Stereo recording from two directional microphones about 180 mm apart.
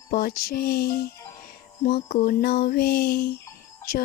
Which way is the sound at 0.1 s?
55° left (ahead or behind).